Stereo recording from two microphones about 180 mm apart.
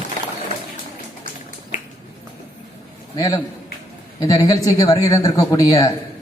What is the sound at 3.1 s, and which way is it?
A man's voice, 20° left (ahead or behind).